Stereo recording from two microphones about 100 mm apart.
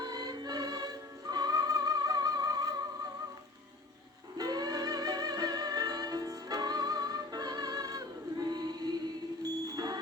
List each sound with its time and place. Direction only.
0.0 s music: 40° right (ahead or behind)
4.4 s music: 40° right (ahead or behind)